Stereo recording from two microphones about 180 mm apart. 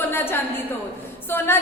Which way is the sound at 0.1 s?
10° left (ahead or behind).